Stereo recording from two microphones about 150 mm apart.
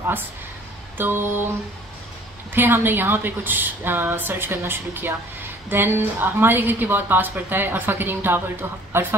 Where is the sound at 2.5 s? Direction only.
15° right (ahead or behind).